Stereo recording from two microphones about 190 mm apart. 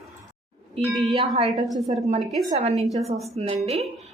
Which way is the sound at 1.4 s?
25° right (ahead or behind).